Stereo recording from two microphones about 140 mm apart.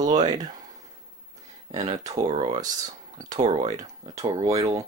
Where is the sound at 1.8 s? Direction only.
25° right (ahead or behind).